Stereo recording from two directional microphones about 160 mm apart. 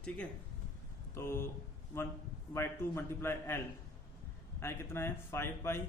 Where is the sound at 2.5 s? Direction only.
15° left (ahead or behind).